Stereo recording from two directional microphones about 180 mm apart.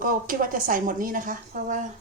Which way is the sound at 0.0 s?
50° right (ahead or behind).